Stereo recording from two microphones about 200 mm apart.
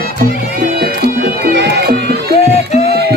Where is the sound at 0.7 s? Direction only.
50° right (ahead or behind).